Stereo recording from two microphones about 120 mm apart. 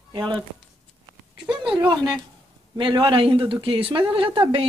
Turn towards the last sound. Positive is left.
turn(degrees=-45)  # may be behind; listen again after turning